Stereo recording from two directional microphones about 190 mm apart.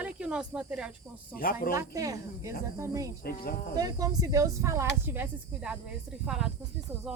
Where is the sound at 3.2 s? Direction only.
50° left (ahead or behind).